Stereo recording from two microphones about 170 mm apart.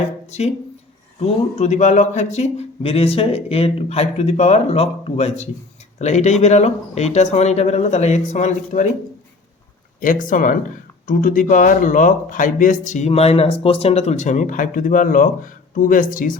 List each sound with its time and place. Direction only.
0.3 s speech: 40° left (ahead or behind)
10.0 s speech: 50° left (ahead or behind)